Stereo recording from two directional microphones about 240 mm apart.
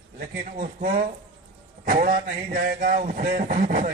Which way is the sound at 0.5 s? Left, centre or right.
Right.